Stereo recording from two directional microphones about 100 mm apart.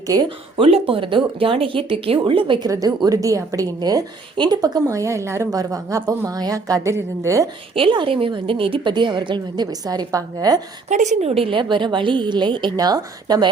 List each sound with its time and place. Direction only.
0.1 s speech: 35° right (ahead or behind)
0.5 s speech: 70° right (ahead or behind)
2.6 s speech: 35° right (ahead or behind)
3.8 s speech: 45° right (ahead or behind)
7.8 s a woman's voice: 60° right (ahead or behind); by 10.6 s 40° right (ahead or behind)
11.2 s a woman's voice: 80° right; by 13.5 s 45° right (ahead or behind)